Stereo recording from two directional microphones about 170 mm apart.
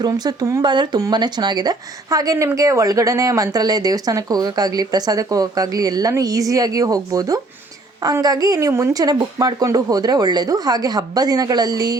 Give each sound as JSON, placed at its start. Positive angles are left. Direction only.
{"t": 0.0, "sound": "speech", "side_deg": -25}